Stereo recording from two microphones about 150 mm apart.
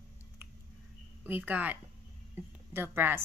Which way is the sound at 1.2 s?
15° right (ahead or behind).